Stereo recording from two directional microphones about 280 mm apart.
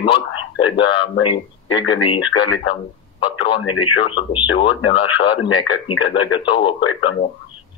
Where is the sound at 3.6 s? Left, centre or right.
Left.